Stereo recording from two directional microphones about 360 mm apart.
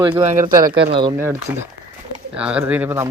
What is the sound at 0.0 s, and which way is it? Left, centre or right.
Speech, centre.